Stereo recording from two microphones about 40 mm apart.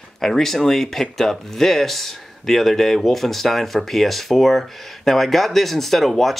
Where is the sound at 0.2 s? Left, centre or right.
Centre.